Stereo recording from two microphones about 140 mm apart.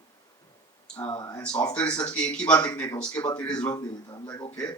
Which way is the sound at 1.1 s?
25° left (ahead or behind).